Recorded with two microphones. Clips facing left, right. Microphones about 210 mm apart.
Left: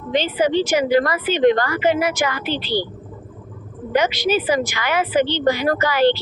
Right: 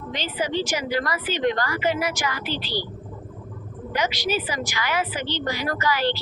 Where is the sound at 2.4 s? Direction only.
20° left (ahead or behind).